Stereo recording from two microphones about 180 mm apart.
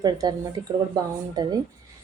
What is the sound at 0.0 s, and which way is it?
Speech, 20° right (ahead or behind).